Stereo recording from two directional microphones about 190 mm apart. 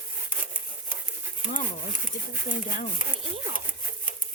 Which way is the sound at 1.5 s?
45° left (ahead or behind).